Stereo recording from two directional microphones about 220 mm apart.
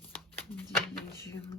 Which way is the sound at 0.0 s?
5° left (ahead or behind).